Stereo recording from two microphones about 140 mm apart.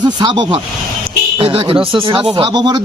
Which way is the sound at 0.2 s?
30° right (ahead or behind).